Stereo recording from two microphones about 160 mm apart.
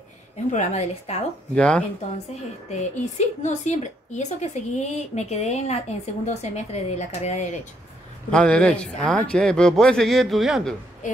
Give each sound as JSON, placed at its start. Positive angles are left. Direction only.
{"t": 0.5, "sound": "a woman's voice", "side_deg": 45}
{"t": 1.5, "sound": "speech", "side_deg": 5}
{"t": 2.7, "sound": "a woman's voice", "side_deg": 45}
{"t": 8.3, "sound": "speech", "side_deg": 5}